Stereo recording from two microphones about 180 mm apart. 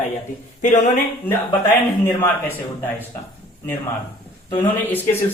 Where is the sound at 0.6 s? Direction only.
45° left (ahead or behind).